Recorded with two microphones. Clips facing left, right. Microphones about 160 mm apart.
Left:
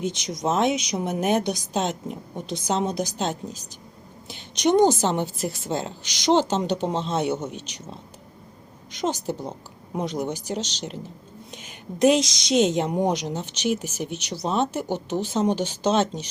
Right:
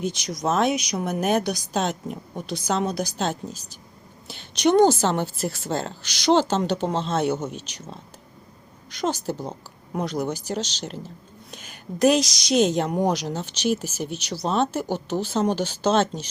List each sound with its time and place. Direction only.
0.0 s a woman's voice: 20° left (ahead or behind)